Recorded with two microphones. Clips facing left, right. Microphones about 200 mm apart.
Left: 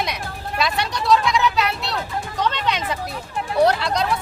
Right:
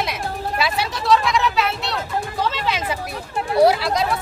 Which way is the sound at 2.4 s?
5° right (ahead or behind).